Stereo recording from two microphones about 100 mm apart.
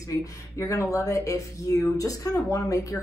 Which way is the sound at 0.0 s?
30° left (ahead or behind).